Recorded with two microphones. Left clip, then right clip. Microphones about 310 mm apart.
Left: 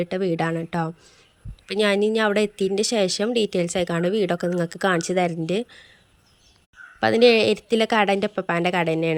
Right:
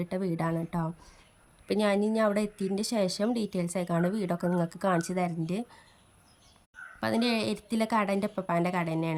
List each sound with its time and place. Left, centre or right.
0.0 s a woman's voice: centre
7.0 s speech: centre